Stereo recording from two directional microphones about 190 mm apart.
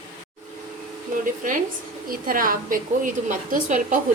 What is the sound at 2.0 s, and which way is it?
A woman's voice, 45° right (ahead or behind).